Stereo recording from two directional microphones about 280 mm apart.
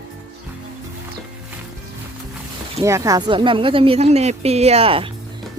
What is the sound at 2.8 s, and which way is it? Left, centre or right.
A woman's voice, centre.